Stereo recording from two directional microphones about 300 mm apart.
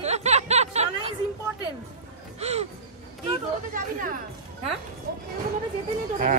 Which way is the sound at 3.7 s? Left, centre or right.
Right.